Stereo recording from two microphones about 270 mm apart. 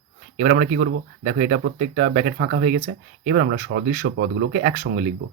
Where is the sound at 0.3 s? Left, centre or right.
Right.